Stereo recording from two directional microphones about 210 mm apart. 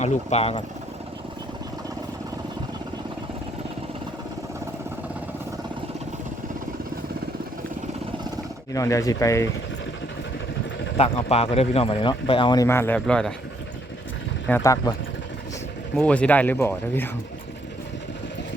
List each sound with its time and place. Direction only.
0.0 s speech: 30° left (ahead or behind)
8.7 s speech: 15° left (ahead or behind)
10.9 s speech: 30° left (ahead or behind); by 13.3 s 5° left (ahead or behind)
14.4 s speech: 10° left (ahead or behind)
16.0 s speech: 5° left (ahead or behind)